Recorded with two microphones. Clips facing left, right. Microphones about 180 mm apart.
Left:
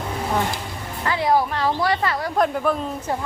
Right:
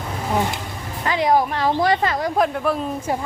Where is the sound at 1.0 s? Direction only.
20° right (ahead or behind).